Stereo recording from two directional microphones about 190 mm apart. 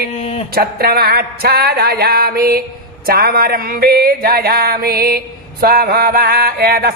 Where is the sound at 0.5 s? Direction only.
55° right (ahead or behind).